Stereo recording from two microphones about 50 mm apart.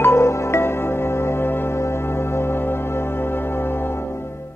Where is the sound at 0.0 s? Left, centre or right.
Left.